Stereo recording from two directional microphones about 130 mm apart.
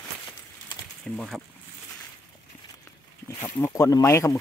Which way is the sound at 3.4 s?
20° left (ahead or behind).